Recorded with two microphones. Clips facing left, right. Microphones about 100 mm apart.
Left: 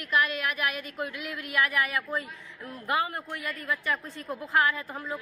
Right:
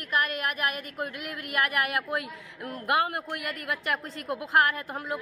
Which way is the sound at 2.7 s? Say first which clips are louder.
Right 3 dB; 65° right (ahead or behind).